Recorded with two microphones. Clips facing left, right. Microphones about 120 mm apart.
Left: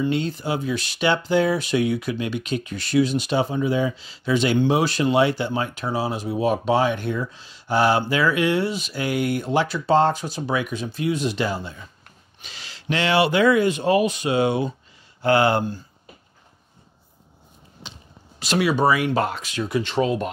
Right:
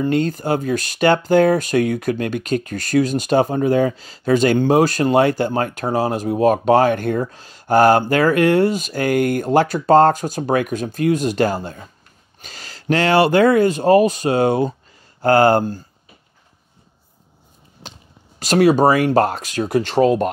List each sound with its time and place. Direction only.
0.0 s speech: 45° right (ahead or behind)
17.8 s basketball bounce: 45° right (ahead or behind)
18.4 s speech: 45° right (ahead or behind)